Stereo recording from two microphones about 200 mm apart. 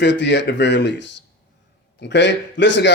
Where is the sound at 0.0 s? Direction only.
60° left (ahead or behind).